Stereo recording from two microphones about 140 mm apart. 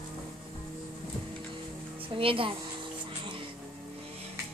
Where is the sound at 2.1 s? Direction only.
40° right (ahead or behind).